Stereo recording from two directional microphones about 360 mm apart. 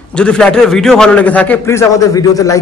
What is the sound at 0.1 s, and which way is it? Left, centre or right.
A man's voice, centre.